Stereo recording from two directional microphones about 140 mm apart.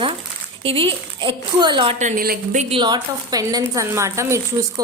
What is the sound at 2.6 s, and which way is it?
A woman's voice, 35° right (ahead or behind).